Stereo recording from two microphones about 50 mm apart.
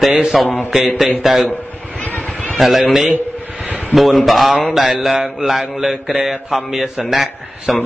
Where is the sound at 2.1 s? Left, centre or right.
Left.